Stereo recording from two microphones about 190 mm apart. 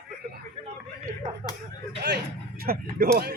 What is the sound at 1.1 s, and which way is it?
Speech, 45° right (ahead or behind).